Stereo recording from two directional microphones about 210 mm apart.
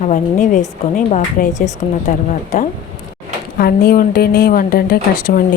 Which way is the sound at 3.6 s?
45° left (ahead or behind).